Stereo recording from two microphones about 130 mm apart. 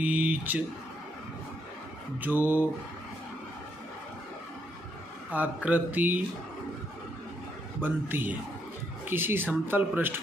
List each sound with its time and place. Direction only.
0.0 s speech: 10° right (ahead or behind)
2.1 s speech: 15° right (ahead or behind)
5.3 s speech: 10° right (ahead or behind)
7.8 s speech: 15° right (ahead or behind)